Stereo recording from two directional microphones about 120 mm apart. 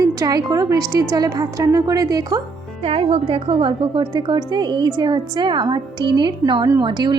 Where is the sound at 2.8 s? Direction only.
55° right (ahead or behind); by 7.1 s 35° right (ahead or behind).